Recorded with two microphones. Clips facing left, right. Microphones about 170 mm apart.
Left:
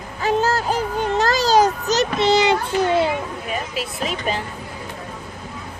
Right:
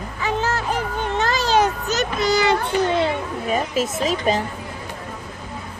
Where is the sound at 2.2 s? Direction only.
25° left (ahead or behind).